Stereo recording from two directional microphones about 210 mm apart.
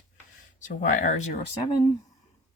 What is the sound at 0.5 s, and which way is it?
Speech, 35° left (ahead or behind).